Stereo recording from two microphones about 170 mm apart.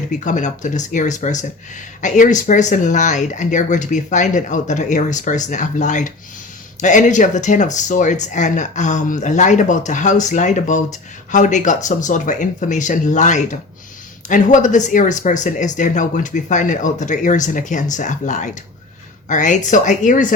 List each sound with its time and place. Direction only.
0.1 s speech: 45° left (ahead or behind)